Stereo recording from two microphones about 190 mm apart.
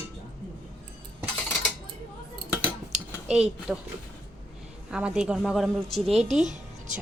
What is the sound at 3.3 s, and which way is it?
Speech, centre (ahead or behind).